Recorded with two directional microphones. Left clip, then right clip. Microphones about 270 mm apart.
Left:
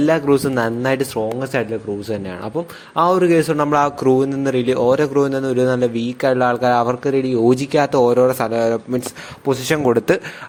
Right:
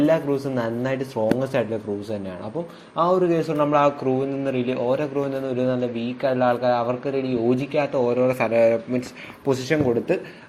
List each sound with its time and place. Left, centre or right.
0.0 s a man's voice: left
2.9 s a man's voice: left